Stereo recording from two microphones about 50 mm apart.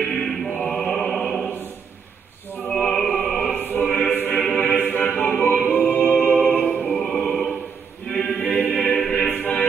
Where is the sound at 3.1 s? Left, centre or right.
Centre.